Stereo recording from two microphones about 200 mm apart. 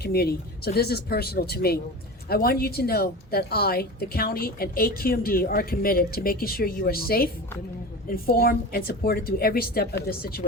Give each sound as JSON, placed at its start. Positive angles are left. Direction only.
{"t": 0.0, "sound": "speech", "side_deg": 50}